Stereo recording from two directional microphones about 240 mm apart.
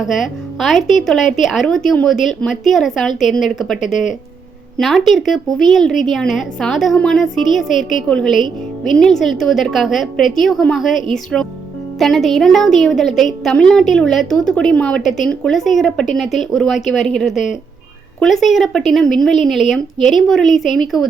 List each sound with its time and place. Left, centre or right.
0.0 s a woman's voice: centre
3.8 s speech: left
4.8 s a woman's voice: centre